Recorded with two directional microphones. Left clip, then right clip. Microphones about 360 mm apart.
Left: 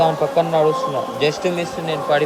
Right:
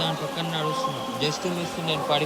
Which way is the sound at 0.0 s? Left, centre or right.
Centre.